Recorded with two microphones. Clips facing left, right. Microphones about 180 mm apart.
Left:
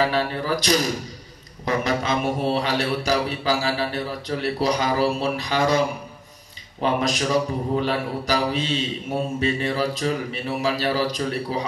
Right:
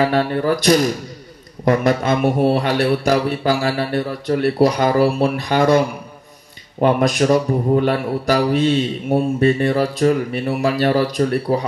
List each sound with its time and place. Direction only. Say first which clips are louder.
0.0 s speech: right 6 dB; 55° right (ahead or behind)